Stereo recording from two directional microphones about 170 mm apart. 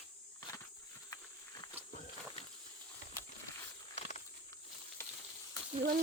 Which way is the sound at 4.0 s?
40° left (ahead or behind).